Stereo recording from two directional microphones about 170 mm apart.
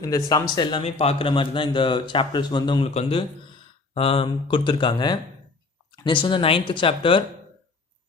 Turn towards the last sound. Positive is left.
turn(degrees=30)  # may be behind; listen again after turning